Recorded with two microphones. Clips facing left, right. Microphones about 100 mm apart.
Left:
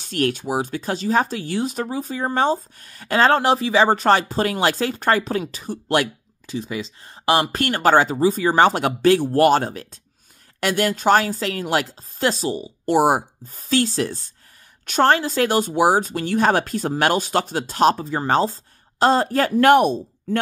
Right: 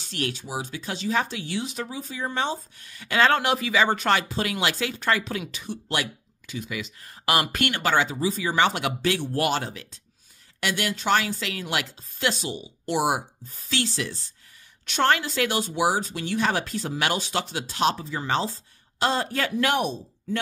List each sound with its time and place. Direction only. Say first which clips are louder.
0.0 s speech: left 9 dB; 50° left (ahead or behind)